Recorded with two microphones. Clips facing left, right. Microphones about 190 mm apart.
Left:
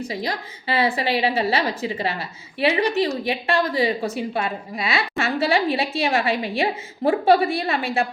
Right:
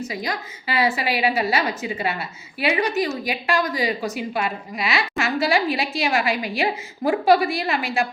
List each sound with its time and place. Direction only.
0.0 s a woman's voice: 30° left (ahead or behind)